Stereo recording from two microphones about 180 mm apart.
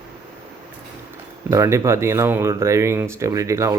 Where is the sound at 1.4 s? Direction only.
15° right (ahead or behind).